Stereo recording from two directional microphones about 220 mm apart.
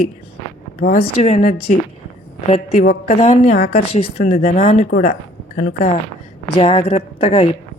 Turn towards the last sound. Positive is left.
turn(degrees=25)  # may be behind; listen again after turning